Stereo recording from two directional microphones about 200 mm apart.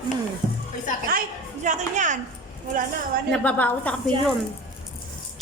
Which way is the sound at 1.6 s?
40° right (ahead or behind).